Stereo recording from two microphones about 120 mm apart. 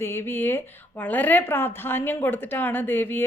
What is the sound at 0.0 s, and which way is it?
A woman's voice, 20° left (ahead or behind).